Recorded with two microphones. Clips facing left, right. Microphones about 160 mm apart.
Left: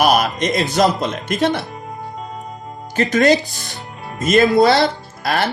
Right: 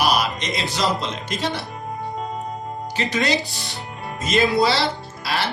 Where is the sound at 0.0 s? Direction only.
50° left (ahead or behind).